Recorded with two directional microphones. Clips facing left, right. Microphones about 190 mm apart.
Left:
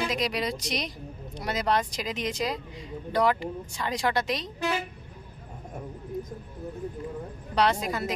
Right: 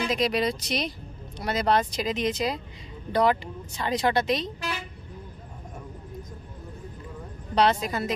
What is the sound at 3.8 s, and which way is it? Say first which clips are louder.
Speech: right 3 dB; 25° right (ahead or behind).